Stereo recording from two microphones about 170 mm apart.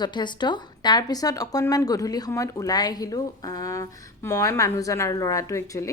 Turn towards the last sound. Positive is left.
turn(degrees=20)  # may be behind; listen again after turning